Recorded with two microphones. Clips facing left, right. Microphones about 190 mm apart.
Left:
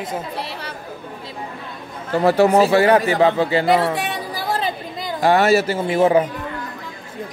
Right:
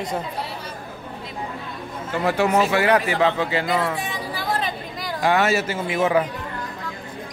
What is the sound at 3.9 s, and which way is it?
Chatter, 70° left (ahead or behind).